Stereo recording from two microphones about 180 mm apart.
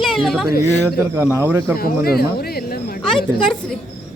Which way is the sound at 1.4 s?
15° right (ahead or behind).